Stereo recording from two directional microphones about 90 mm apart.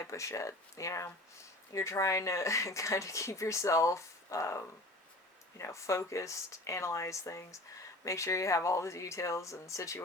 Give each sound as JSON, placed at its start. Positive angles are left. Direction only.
{"t": 0.0, "sound": "speech", "side_deg": 35}